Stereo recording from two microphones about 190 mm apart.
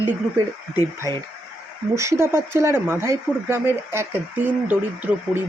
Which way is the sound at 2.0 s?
15° right (ahead or behind).